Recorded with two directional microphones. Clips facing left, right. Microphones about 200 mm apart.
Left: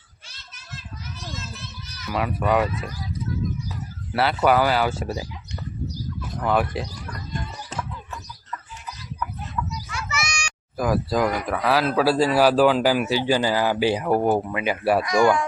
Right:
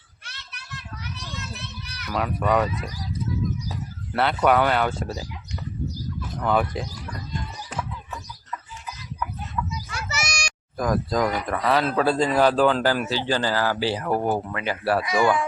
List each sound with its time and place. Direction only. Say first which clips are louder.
0.3 s children playing: right 1 dB; 65° right (ahead or behind)
2.0 s speech: left 1 dB; 5° left (ahead or behind)
4.1 s speech: left 1 dB; 5° left (ahead or behind)
6.4 s speech: left 1 dB; 5° left (ahead or behind)
9.9 s a sound: left 2 dB; 40° right (ahead or behind)
10.8 s speech: left 1 dB; 5° left (ahead or behind)
15.0 s speech: left 2 dB; 5° right (ahead or behind)